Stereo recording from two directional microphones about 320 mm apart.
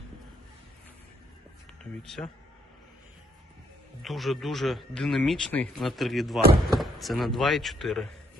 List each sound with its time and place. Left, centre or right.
2.0 s speech: centre
4.0 s speech: centre